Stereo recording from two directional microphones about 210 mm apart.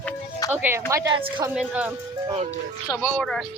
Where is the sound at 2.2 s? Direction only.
30° right (ahead or behind).